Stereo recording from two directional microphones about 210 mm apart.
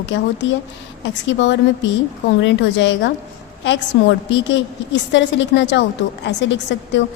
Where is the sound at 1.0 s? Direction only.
60° left (ahead or behind).